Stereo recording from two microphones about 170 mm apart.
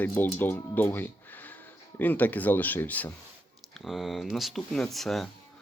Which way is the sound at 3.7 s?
Centre (ahead or behind).